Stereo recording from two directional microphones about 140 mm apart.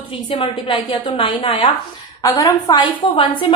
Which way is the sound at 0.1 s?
40° left (ahead or behind).